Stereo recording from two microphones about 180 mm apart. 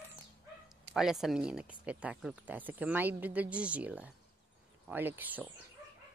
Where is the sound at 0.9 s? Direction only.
Centre (ahead or behind).